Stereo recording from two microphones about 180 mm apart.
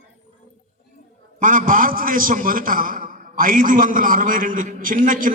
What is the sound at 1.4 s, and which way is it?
A man's voice, 50° right (ahead or behind).